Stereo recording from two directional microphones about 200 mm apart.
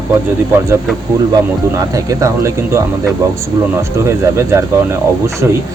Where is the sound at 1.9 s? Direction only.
15° right (ahead or behind).